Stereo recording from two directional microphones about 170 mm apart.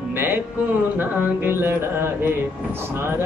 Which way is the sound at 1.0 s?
10° right (ahead or behind).